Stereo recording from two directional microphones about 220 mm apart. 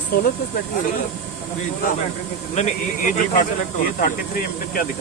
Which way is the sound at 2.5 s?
30° left (ahead or behind).